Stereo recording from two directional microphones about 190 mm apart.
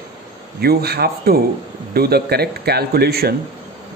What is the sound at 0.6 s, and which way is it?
Speech, 55° right (ahead or behind).